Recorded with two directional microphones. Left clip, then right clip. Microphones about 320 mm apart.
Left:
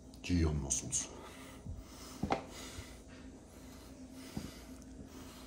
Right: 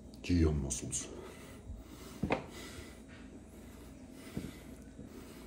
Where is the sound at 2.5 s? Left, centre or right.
Centre.